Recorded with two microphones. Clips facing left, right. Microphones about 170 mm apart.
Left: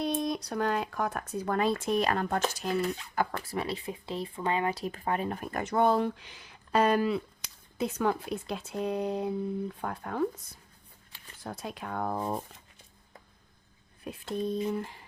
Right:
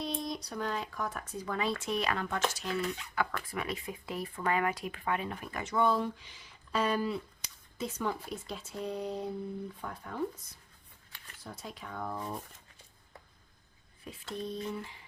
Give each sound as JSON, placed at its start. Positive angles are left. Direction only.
{"t": 0.0, "sound": "speech", "side_deg": 60}
{"t": 11.4, "sound": "speech", "side_deg": 65}
{"t": 14.0, "sound": "speech", "side_deg": 55}